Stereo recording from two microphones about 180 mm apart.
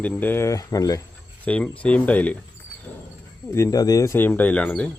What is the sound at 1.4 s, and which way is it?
Speech, 5° left (ahead or behind).